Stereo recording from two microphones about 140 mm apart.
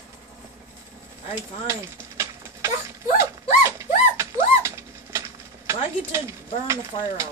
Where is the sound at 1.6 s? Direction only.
20° right (ahead or behind).